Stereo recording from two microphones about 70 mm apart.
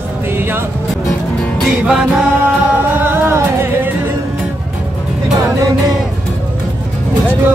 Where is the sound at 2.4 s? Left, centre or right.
Right.